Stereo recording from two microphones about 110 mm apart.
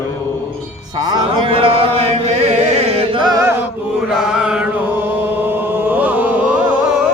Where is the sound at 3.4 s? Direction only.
20° right (ahead or behind).